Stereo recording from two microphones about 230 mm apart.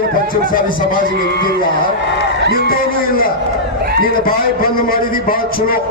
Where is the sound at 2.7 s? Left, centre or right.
Left.